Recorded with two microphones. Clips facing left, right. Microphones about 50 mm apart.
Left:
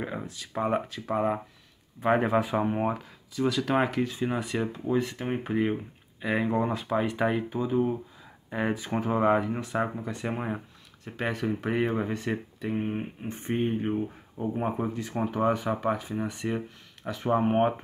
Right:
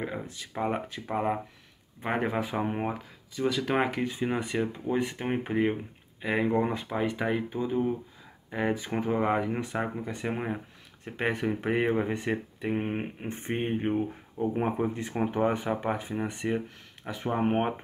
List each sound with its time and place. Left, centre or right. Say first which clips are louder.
0.0 s speech: even; centre
6.9 s speech: left 2 dB; centre
11.1 s speech: right 1 dB; right
12.7 s speech: left 1 dB; right
15.1 s speech: left 1 dB; centre
17.0 s speech: left 2 dB; centre